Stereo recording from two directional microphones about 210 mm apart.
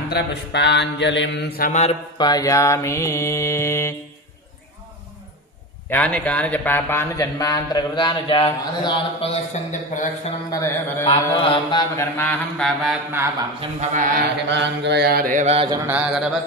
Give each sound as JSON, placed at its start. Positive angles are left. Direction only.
{"t": 0.1, "sound": "mantra", "side_deg": 55}
{"t": 1.7, "sound": "speech", "side_deg": 30}
{"t": 2.1, "sound": "a man's voice", "side_deg": 20}
{"t": 5.9, "sound": "a man's voice", "side_deg": 5}
{"t": 10.5, "sound": "a man's voice", "side_deg": 15}
{"t": 11.1, "sound": "mantra", "side_deg": 25}
{"t": 12.0, "sound": "mantra", "side_deg": 10}
{"t": 13.6, "sound": "speech", "side_deg": -35}
{"t": 14.5, "sound": "mantra", "side_deg": -55}
{"t": 15.9, "sound": "mantra", "side_deg": -5}